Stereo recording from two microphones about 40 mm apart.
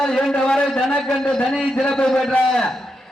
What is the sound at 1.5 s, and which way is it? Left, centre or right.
A man's voice, centre.